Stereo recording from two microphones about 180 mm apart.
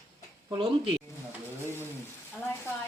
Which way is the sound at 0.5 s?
30° right (ahead or behind).